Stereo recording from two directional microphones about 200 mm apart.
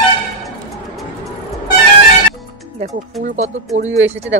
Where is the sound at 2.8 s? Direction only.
35° right (ahead or behind).